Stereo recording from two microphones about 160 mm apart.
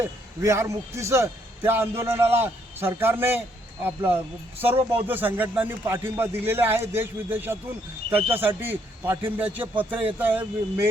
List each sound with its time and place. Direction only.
0.0 s a man's voice: 15° right (ahead or behind)